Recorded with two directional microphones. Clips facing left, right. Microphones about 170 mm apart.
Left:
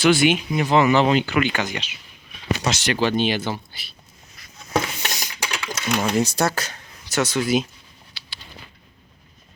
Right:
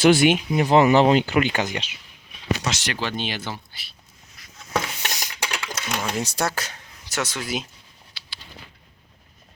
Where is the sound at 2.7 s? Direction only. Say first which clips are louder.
Left 6 dB; 15° left (ahead or behind).